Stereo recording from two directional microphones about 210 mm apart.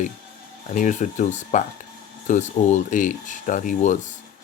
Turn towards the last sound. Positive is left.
turn(degrees=35)  # may be behind; listen again after turning